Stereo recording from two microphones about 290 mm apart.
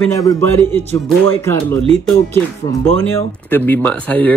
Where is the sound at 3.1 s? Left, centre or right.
Centre.